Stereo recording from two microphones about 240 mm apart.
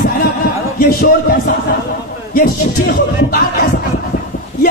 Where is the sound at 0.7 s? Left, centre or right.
Left.